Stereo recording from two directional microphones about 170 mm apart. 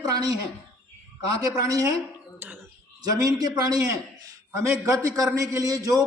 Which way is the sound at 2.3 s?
10° right (ahead or behind).